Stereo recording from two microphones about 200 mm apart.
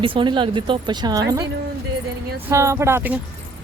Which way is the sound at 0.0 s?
25° right (ahead or behind).